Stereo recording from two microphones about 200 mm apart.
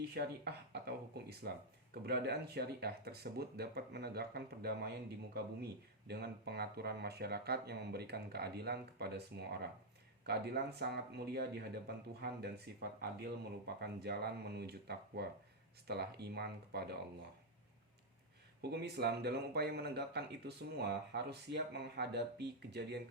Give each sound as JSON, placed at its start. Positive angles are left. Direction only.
{"t": 0.0, "sound": "speech", "side_deg": -55}
{"t": 18.6, "sound": "speech", "side_deg": -55}